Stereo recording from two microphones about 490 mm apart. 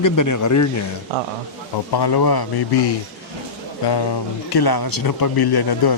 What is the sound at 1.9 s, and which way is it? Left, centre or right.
Speech, left.